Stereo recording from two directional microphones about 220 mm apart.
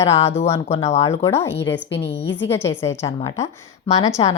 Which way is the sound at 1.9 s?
55° left (ahead or behind).